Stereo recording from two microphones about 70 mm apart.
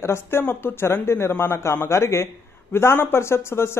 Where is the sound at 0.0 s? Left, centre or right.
Left.